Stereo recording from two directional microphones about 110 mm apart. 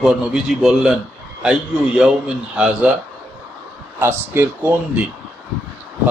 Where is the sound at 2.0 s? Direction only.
10° right (ahead or behind).